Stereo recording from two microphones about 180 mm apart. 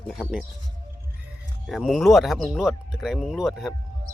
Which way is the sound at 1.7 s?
Centre (ahead or behind).